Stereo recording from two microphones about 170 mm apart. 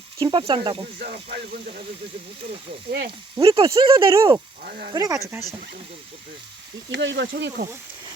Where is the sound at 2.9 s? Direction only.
65° right (ahead or behind).